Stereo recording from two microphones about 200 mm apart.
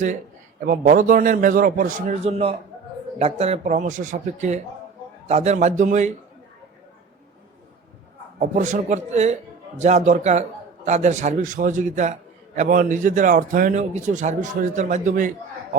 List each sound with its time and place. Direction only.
0.6 s a man's voice: 45° right (ahead or behind)
8.4 s a man's voice: 40° right (ahead or behind)